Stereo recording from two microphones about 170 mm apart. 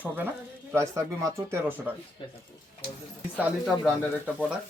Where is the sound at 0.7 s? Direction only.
15° right (ahead or behind).